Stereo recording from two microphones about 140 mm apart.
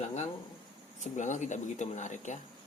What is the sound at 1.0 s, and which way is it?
Speech, 60° left (ahead or behind).